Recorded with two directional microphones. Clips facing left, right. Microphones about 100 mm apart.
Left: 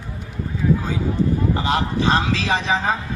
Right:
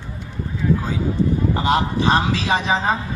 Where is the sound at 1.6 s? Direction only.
20° right (ahead or behind).